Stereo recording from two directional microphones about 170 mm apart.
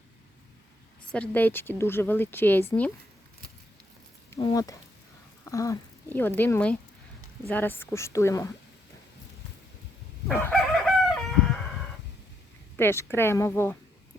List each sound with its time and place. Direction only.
1.1 s speech: 10° left (ahead or behind)
4.5 s speech: 20° left (ahead or behind)
10.3 s speech: 15° left (ahead or behind)
10.8 s chicken: centre (ahead or behind)
12.7 s speech: 15° left (ahead or behind)